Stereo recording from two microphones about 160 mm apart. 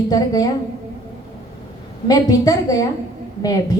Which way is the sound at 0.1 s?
25° left (ahead or behind).